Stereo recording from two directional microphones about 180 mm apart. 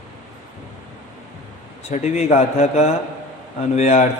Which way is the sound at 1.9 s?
40° left (ahead or behind).